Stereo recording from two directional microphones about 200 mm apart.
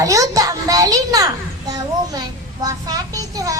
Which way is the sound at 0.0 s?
15° right (ahead or behind).